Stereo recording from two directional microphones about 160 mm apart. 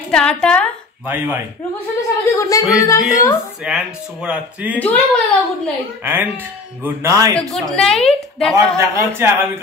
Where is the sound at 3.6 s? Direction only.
5° right (ahead or behind).